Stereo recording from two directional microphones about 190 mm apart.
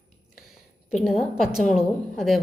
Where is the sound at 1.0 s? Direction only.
Centre (ahead or behind).